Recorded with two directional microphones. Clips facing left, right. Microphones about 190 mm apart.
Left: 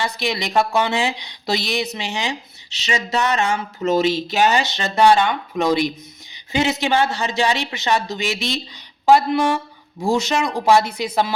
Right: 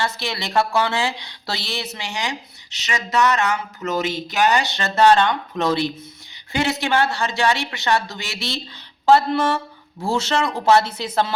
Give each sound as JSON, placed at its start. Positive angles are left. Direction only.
{"t": 0.0, "sound": "speech", "side_deg": 15}